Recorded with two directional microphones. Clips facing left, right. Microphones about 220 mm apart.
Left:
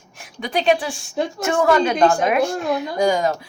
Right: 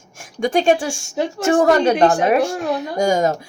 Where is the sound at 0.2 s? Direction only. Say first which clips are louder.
Right 6 dB; 45° right (ahead or behind).